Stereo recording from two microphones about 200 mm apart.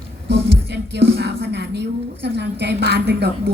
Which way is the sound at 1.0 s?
55° right (ahead or behind).